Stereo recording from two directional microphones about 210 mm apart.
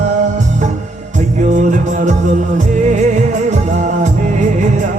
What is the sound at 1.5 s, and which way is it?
Music, 35° right (ahead or behind).